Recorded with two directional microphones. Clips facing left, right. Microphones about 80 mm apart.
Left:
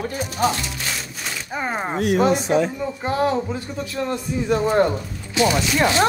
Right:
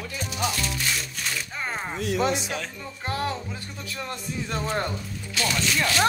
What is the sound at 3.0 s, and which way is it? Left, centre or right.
Speech, centre.